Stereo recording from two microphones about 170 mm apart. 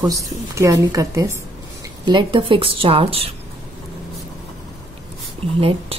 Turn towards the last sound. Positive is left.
turn(degrees=-35)  # may be behind; listen again after turning